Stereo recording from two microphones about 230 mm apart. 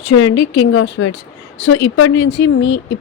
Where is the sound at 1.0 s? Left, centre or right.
Left.